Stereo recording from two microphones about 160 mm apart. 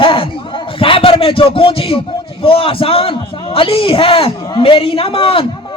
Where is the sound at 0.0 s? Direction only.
35° left (ahead or behind).